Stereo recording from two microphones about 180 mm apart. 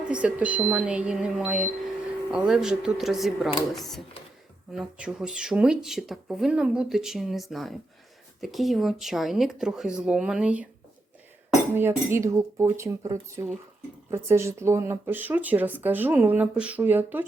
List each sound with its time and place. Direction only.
0.0 s speech: 5° right (ahead or behind)
11.7 s speech: 15° right (ahead or behind)